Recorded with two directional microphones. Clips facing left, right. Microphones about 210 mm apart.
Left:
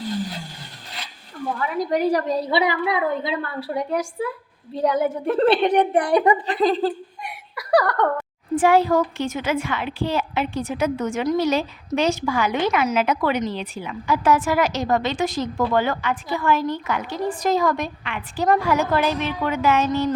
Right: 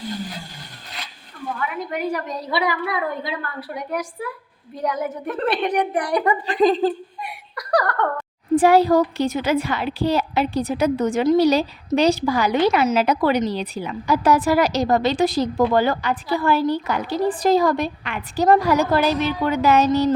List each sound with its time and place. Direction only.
1.6 s a woman's voice: 35° left (ahead or behind)
6.4 s a woman's voice: 15° right (ahead or behind)
7.2 s a sound: centre (ahead or behind)
8.5 s a woman's voice: 35° right (ahead or behind)